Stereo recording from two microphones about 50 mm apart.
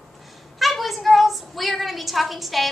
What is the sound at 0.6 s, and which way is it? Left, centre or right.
A woman's voice, centre.